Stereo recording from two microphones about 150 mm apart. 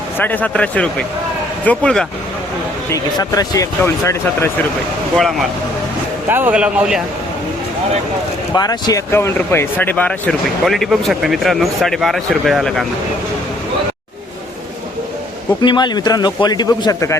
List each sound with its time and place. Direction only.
0.2 s speech: 10° left (ahead or behind)
2.9 s speech: 25° left (ahead or behind)
6.2 s a man's voice: 15° right (ahead or behind)
8.5 s speech: 25° left (ahead or behind); by 12.8 s centre (ahead or behind)
15.6 s speech: 30° left (ahead or behind)